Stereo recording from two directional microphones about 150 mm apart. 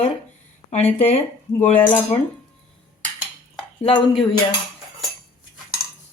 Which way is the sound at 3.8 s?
40° left (ahead or behind).